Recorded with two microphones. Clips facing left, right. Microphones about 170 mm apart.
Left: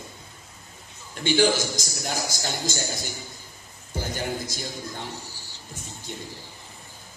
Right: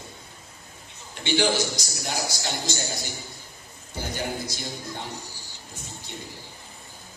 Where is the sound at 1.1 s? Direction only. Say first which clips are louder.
Left 2 dB; 45° left (ahead or behind).